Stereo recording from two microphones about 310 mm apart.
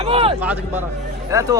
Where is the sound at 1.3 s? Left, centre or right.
Centre.